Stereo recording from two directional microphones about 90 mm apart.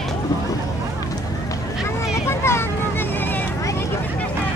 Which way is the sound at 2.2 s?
30° left (ahead or behind).